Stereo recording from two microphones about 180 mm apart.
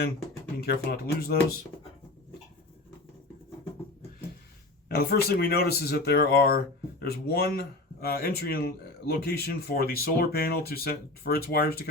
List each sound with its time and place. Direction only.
0.6 s speech: 60° left (ahead or behind)
4.9 s speech: 60° left (ahead or behind)